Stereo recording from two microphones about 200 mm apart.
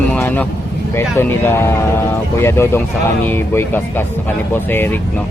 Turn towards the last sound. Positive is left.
turn(degrees=10)  # may be behind; listen again after turning